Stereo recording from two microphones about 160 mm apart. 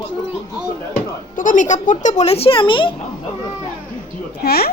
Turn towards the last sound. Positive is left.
turn(degrees=80)